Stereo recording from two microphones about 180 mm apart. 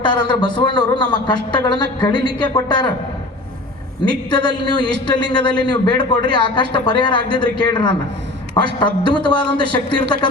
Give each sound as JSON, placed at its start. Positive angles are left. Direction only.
{"t": 0.0, "sound": "a man's voice", "side_deg": 25}
{"t": 4.1, "sound": "a man's voice", "side_deg": 25}